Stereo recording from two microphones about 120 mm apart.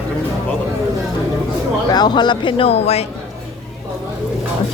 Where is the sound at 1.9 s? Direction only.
35° left (ahead or behind); by 3.1 s 60° left (ahead or behind).